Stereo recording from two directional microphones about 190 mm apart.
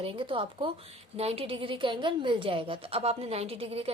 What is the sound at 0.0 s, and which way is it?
A woman's voice, 30° right (ahead or behind).